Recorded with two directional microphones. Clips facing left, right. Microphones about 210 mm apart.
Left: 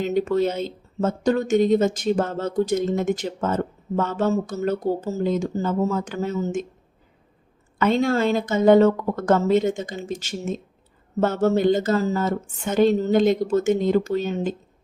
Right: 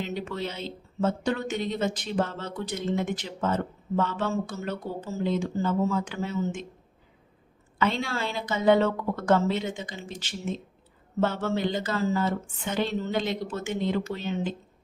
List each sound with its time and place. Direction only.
0.0 s speech: 45° left (ahead or behind)
7.8 s speech: 45° left (ahead or behind)